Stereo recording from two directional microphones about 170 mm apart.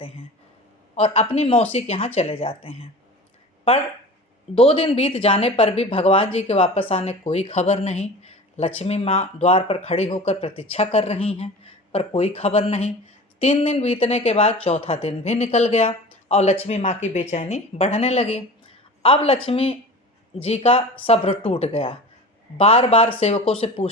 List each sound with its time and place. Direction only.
0.9 s speech: 35° left (ahead or behind)
4.5 s speech: 35° left (ahead or behind)